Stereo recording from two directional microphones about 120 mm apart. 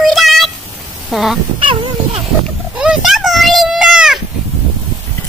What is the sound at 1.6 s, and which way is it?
Speech, 45° right (ahead or behind).